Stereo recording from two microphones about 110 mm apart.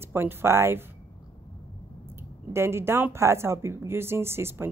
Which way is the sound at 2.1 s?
20° right (ahead or behind).